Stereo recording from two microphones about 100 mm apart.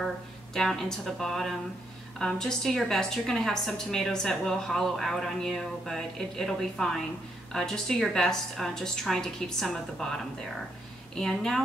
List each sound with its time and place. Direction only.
0.6 s a woman's voice: 5° left (ahead or behind)